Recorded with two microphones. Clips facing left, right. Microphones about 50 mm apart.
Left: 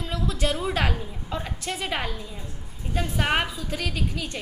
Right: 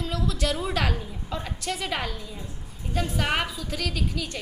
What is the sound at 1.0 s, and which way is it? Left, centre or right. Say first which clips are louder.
A woman's voice: left 1 dB; centre.